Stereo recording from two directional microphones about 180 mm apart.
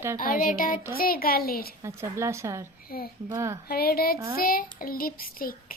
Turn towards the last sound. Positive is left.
turn(degrees=55)  # may be behind; listen again after turning